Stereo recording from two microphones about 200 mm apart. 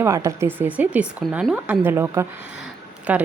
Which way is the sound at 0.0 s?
15° right (ahead or behind).